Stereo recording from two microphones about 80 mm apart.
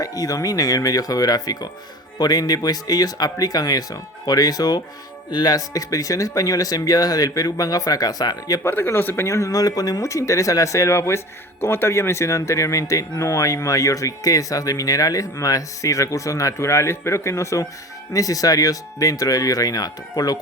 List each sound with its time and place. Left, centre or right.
0.0 s speech: left
5.3 s speech: left
5.5 s speech: left
8.6 s speech: left